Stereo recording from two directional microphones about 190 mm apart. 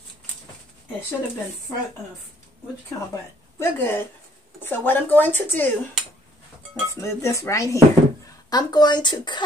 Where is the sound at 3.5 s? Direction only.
15° left (ahead or behind).